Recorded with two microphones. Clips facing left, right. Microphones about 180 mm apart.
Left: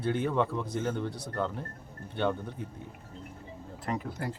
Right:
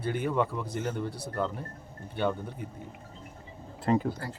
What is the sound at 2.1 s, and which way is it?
Speech, 5° right (ahead or behind).